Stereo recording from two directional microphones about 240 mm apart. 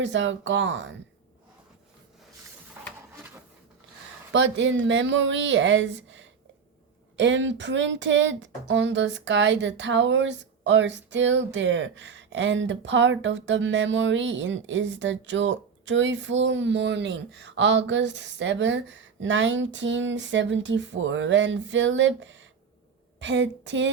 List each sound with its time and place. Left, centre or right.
0.0 s speech: right
4.3 s speech: right